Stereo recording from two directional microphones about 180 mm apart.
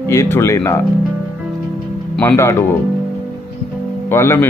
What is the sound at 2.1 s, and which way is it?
Speech, 15° left (ahead or behind).